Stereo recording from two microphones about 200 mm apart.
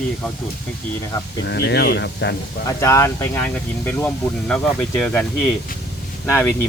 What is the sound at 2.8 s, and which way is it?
Speech, 15° left (ahead or behind).